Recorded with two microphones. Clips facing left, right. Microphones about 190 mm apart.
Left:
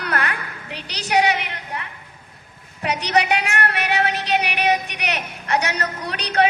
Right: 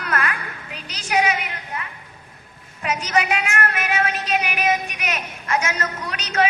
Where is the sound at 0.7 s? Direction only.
70° left (ahead or behind).